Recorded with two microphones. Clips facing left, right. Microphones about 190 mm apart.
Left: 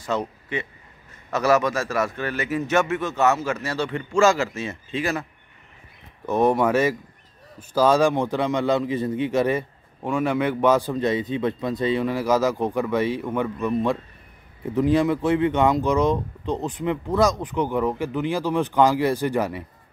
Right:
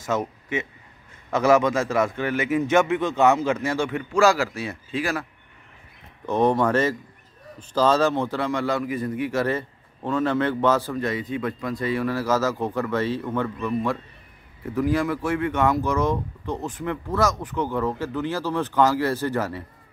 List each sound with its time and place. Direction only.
0.1 s a man's voice: 15° right (ahead or behind)
1.3 s a man's voice: 15° right (ahead or behind)
6.2 s speech: 10° left (ahead or behind)